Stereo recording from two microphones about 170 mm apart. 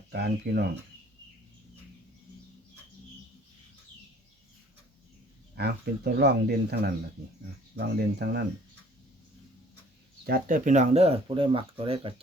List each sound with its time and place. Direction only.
0.1 s speech: 70° right (ahead or behind)
5.5 s speech: 70° right (ahead or behind)
10.2 s speech: 55° right (ahead or behind); by 12.1 s 35° right (ahead or behind)